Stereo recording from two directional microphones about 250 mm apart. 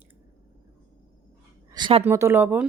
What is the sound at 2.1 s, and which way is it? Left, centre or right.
Speech, centre.